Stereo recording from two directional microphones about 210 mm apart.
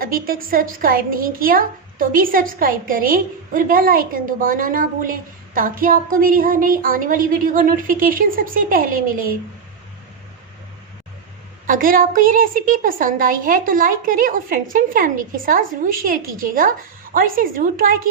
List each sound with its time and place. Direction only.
0.0 s a woman's voice: 45° right (ahead or behind)
11.6 s a woman's voice: 40° right (ahead or behind)